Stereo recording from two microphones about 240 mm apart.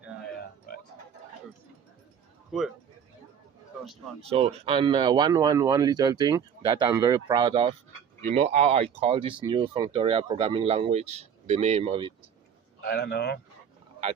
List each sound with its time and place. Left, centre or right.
4.3 s speech: right
12.8 s a man's voice: left